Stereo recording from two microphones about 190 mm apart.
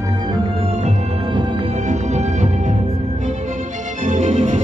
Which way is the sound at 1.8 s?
40° right (ahead or behind).